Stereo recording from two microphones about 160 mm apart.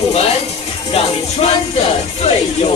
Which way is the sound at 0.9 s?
40° left (ahead or behind).